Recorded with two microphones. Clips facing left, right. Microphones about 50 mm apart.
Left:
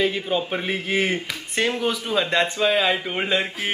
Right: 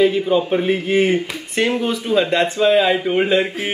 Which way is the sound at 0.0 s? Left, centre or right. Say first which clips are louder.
Right 7 dB; centre.